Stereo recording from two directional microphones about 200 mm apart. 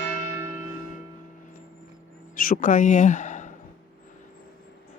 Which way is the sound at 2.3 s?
45° left (ahead or behind).